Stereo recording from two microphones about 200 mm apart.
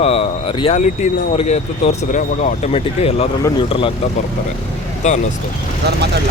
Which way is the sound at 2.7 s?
30° left (ahead or behind).